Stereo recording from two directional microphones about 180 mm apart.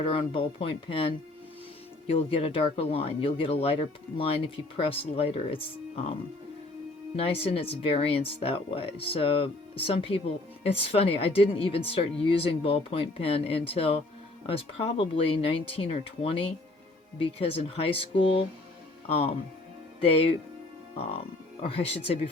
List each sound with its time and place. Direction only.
0.0 s speech: 30° left (ahead or behind)
7.2 s speech: 30° left (ahead or behind)